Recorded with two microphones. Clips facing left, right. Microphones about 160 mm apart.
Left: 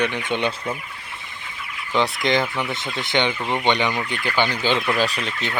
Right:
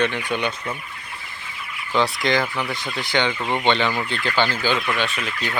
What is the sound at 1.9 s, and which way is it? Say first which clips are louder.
Fowl: even; 20° left (ahead or behind).